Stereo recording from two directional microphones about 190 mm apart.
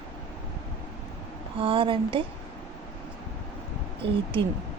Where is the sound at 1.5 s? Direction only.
30° right (ahead or behind).